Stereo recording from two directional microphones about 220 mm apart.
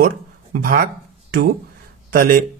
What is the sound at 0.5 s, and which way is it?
Speech, 40° right (ahead or behind).